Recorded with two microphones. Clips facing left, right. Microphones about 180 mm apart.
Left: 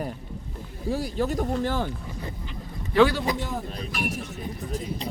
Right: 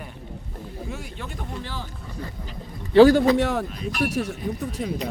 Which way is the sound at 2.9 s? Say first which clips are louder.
Right 7 dB; 40° right (ahead or behind).